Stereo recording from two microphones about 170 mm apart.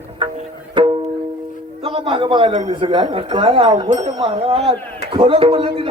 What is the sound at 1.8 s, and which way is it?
A man's voice, 35° right (ahead or behind).